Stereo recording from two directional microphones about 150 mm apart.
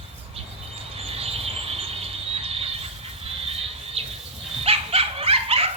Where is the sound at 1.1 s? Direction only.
40° right (ahead or behind).